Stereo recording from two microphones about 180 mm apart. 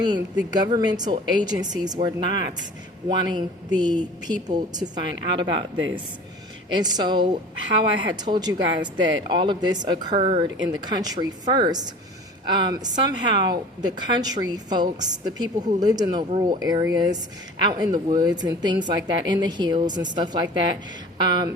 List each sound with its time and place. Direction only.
0.0 s speech: 25° right (ahead or behind)